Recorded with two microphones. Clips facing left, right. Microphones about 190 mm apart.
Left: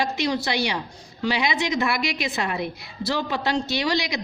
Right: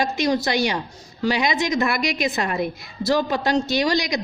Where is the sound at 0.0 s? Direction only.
45° right (ahead or behind).